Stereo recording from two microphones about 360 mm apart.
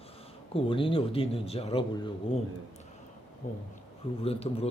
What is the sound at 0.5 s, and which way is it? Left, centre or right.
Speech, centre.